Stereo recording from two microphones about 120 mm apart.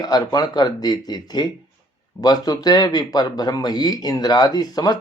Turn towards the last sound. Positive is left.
turn(degrees=35)  # may be behind; listen again after turning